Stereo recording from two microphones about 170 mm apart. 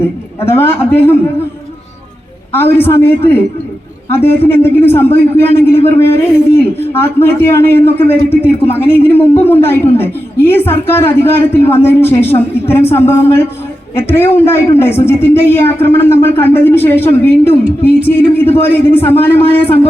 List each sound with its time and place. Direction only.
0.0 s a man's voice: 15° left (ahead or behind)
2.5 s a man's voice: 15° left (ahead or behind)
8.4 s a man's voice: 35° left (ahead or behind)
8.8 s a man's voice: 15° left (ahead or behind)